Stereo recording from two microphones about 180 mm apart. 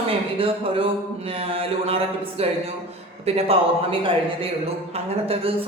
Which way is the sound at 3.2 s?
35° right (ahead or behind).